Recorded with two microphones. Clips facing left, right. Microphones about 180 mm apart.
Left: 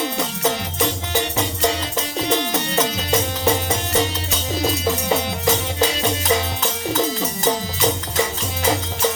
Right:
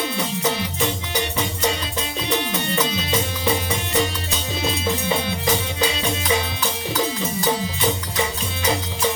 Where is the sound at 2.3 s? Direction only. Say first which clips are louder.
Left 2 dB; 45° left (ahead or behind).